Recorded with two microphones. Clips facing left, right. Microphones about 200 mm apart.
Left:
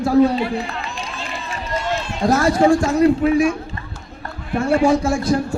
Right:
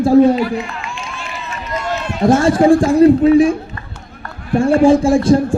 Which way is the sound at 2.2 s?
25° right (ahead or behind).